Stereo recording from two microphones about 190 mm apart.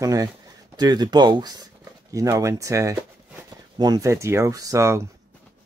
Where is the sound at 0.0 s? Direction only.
20° right (ahead or behind).